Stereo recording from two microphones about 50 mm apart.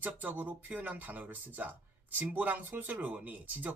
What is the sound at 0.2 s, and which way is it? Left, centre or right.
Speech, right.